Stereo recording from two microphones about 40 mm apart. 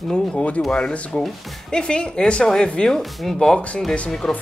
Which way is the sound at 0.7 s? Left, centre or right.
Left.